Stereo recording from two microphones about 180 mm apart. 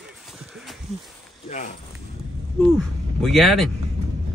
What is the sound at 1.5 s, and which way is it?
Speech, 45° left (ahead or behind).